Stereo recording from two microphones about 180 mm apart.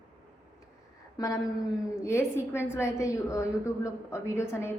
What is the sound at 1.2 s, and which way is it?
A woman's voice, 20° left (ahead or behind).